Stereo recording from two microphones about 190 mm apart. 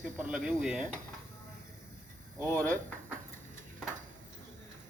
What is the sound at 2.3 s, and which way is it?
Speech, 20° left (ahead or behind).